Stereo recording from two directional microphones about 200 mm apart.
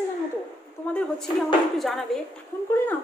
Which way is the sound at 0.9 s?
5° left (ahead or behind).